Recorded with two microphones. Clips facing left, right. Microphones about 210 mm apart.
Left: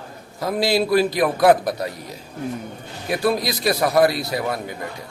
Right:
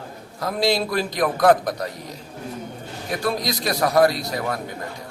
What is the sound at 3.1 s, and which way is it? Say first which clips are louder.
A man's voice: left 4 dB; 5° left (ahead or behind).